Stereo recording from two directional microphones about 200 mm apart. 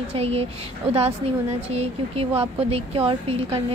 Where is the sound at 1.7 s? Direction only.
30° right (ahead or behind).